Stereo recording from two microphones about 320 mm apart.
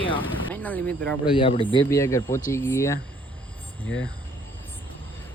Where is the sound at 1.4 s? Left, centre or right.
Centre.